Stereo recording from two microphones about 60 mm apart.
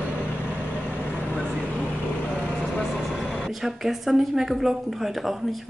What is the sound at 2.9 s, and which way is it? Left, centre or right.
A woman's voice, centre.